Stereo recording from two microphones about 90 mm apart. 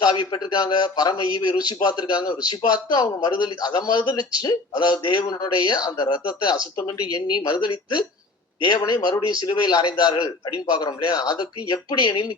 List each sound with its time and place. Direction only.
0.1 s a man's voice: 50° left (ahead or behind)